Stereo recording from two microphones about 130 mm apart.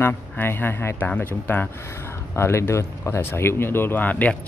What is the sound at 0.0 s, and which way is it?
Speech, 15° left (ahead or behind).